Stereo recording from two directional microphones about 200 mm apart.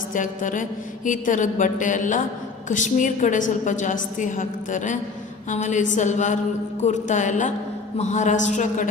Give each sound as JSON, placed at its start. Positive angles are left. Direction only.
{"t": 0.1, "sound": "a woman's voice", "side_deg": 40}